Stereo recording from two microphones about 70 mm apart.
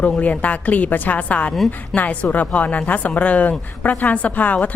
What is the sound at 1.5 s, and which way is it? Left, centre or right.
Speech, centre.